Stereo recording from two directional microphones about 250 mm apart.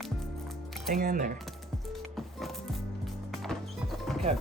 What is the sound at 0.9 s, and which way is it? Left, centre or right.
Speech, right.